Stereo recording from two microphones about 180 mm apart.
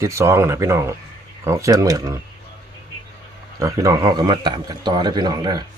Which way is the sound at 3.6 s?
20° right (ahead or behind).